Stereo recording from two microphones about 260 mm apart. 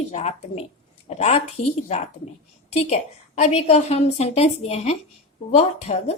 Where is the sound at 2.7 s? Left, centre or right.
Left.